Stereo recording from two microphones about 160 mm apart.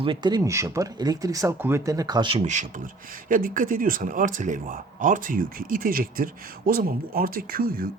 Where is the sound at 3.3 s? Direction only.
60° right (ahead or behind).